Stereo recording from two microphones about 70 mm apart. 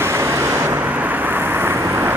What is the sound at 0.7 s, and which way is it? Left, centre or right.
Vehicle, right.